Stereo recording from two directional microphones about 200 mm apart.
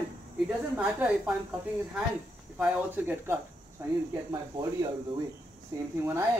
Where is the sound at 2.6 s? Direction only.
5° right (ahead or behind).